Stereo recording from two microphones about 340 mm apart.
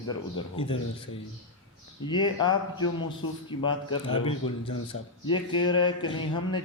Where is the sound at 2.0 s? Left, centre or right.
Centre.